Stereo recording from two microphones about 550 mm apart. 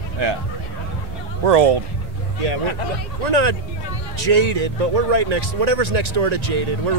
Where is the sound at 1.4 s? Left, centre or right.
Right.